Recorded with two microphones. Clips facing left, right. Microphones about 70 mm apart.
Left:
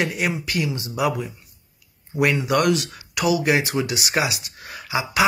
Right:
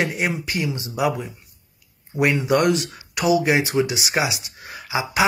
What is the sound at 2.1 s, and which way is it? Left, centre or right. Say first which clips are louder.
Speech: right 1 dB; right.